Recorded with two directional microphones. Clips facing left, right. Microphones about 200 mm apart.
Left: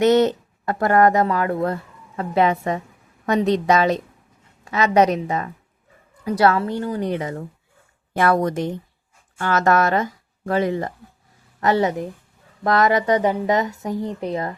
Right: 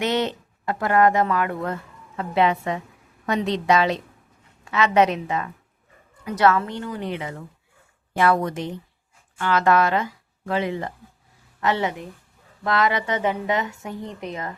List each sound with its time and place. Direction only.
0.0 s a woman's voice: 45° left (ahead or behind)